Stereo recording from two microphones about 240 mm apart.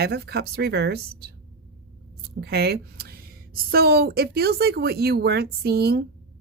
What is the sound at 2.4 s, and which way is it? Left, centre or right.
A woman's voice, right.